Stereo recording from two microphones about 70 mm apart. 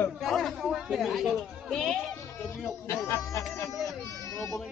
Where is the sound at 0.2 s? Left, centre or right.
Centre.